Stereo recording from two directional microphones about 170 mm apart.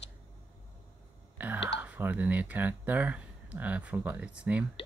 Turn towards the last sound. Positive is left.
turn(degrees=-5)  # may be behind; listen again after turning